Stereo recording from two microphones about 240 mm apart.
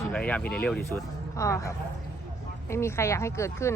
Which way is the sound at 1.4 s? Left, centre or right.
Centre.